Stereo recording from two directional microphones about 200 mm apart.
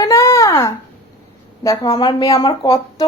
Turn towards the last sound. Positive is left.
turn(degrees=20)  # may be behind; listen again after turning